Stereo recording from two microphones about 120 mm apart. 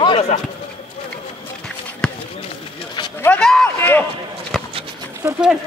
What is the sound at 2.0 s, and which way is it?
Run, 5° left (ahead or behind).